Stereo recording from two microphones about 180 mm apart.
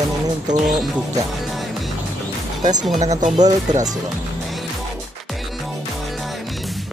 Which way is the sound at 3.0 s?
40° right (ahead or behind).